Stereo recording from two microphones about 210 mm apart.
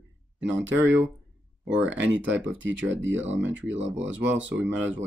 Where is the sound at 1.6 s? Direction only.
5° right (ahead or behind).